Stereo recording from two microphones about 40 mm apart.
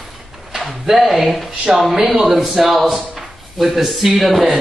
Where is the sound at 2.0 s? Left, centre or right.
Right.